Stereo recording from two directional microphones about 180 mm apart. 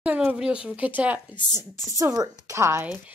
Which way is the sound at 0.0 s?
10° right (ahead or behind).